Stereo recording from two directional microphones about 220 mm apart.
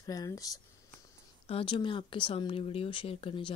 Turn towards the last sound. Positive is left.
turn(degrees=25)  # may be behind; listen again after turning